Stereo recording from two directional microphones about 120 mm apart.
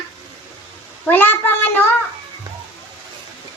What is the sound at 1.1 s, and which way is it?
Child singing, 15° left (ahead or behind).